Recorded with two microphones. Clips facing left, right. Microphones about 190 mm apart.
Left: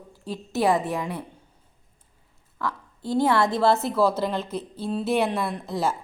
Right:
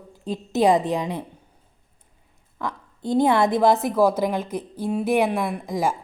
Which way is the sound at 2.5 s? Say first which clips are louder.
Even; 20° right (ahead or behind).